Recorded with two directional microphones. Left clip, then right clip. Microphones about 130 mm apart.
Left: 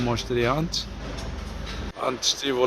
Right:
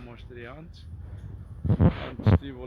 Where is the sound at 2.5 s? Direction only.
50° left (ahead or behind).